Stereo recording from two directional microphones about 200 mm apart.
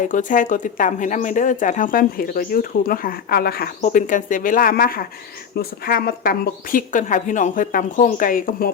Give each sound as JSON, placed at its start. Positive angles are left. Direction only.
{"t": 0.0, "sound": "speech", "side_deg": 40}